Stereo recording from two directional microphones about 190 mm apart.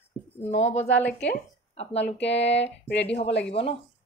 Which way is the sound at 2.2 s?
65° left (ahead or behind).